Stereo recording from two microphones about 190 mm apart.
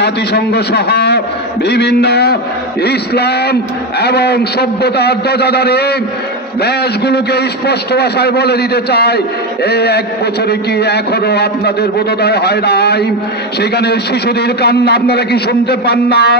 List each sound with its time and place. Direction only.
0.0 s a man's voice: 60° left (ahead or behind)